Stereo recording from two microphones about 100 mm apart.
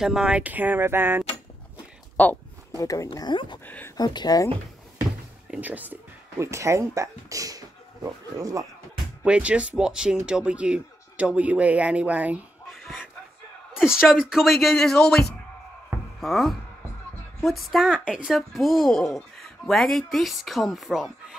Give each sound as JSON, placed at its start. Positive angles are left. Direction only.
{"t": 0.0, "sound": "speech", "side_deg": -5}
{"t": 2.2, "sound": "speech", "side_deg": 15}
{"t": 2.8, "sound": "speech", "side_deg": 35}
{"t": 3.1, "sound": "speech", "side_deg": 50}
{"t": 3.6, "sound": "speech", "side_deg": 20}
{"t": 3.9, "sound": "speech", "side_deg": 45}
{"t": 5.5, "sound": "speech", "side_deg": -15}
{"t": 6.4, "sound": "speech", "side_deg": -30}
{"t": 9.2, "sound": "speech", "side_deg": -10}
{"t": 12.6, "sound": "a sound", "side_deg": 0}
{"t": 14.1, "sound": "a woman's voice", "side_deg": -5}